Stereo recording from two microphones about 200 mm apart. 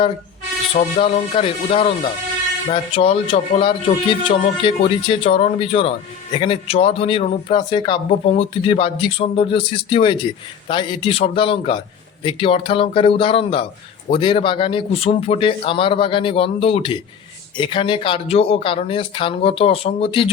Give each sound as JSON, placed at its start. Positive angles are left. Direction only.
{"t": 0.7, "sound": "speech", "side_deg": 30}